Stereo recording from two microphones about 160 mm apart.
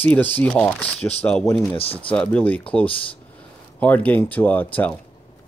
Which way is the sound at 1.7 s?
35° left (ahead or behind).